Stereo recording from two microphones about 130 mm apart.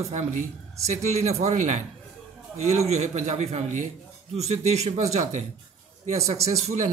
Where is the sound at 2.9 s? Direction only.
55° right (ahead or behind).